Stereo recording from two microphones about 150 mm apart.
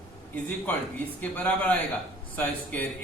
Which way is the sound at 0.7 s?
10° left (ahead or behind).